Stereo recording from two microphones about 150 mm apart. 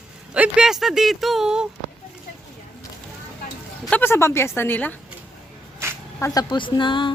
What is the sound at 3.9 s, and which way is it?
A woman's voice, 15° left (ahead or behind).